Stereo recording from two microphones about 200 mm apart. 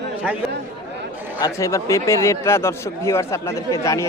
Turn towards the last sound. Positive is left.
turn(degrees=15)  # may be behind; listen again after turning